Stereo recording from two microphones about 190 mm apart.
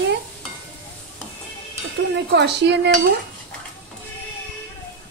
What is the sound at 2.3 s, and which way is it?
Speech, 65° right (ahead or behind).